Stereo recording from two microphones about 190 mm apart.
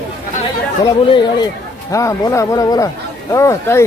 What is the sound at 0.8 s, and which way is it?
Speech, 25° left (ahead or behind).